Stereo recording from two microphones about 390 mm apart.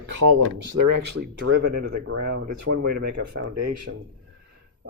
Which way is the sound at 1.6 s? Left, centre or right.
Right.